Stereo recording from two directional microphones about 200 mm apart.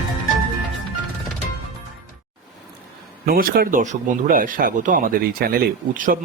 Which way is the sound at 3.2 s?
45° right (ahead or behind).